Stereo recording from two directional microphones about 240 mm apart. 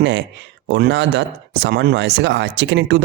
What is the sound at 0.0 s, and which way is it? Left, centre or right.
Speech, right.